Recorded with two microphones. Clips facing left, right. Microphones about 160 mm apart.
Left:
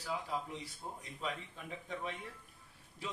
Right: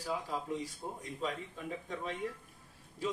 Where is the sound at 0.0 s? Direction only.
40° right (ahead or behind).